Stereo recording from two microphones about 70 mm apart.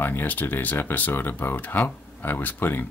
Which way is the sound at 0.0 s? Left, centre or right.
Left.